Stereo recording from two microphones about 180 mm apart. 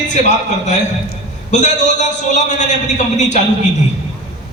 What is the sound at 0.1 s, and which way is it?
A man's voice, 40° left (ahead or behind).